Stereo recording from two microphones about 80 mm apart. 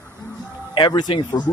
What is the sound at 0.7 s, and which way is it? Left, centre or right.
Speech, left.